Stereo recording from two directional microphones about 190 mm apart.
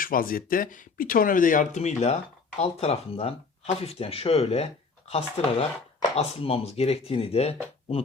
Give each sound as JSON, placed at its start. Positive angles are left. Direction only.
{"t": 0.0, "sound": "speech", "side_deg": 50}